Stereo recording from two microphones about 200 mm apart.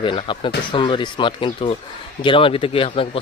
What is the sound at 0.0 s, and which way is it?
Speech, 25° left (ahead or behind).